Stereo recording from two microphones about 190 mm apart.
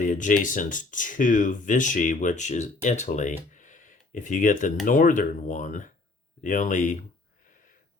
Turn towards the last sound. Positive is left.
turn(degrees=40)  # may be behind; listen again after turning